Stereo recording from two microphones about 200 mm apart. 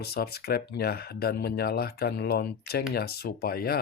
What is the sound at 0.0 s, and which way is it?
Speech, 50° left (ahead or behind).